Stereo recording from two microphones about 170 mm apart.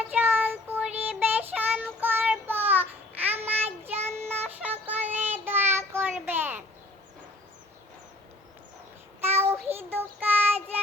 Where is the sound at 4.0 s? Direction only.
40° right (ahead or behind).